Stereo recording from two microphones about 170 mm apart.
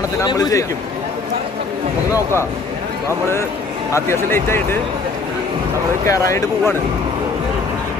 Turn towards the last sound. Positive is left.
turn(degrees=20)  # may be behind; listen again after turning